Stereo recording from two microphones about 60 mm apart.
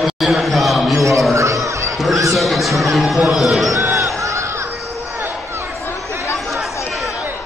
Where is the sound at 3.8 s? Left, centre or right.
Right.